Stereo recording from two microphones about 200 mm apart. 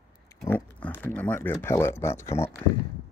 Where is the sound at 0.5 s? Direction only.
5° left (ahead or behind).